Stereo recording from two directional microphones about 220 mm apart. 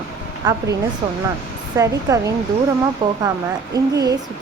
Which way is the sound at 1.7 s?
15° right (ahead or behind).